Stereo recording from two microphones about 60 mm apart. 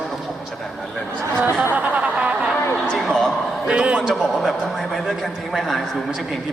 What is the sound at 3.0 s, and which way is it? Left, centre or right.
Speech, centre.